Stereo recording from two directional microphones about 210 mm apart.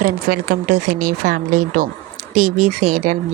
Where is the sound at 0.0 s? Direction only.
40° right (ahead or behind).